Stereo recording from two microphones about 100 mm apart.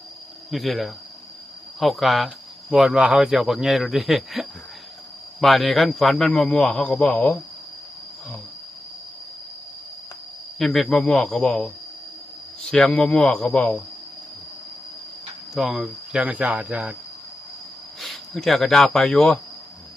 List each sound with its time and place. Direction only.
0.5 s speech: centre (ahead or behind)
10.6 s speech: centre (ahead or behind)
15.5 s cricket: centre (ahead or behind)
18.0 s speech: centre (ahead or behind)